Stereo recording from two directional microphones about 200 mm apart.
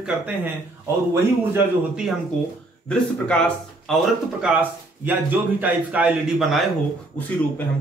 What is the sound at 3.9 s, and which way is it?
A man's voice, 5° right (ahead or behind).